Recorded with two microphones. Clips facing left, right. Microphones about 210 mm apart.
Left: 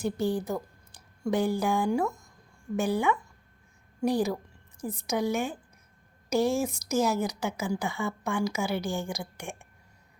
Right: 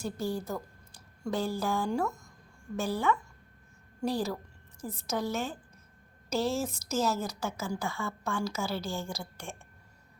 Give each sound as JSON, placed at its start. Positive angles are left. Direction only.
{"t": 0.0, "sound": "a woman's voice", "side_deg": 15}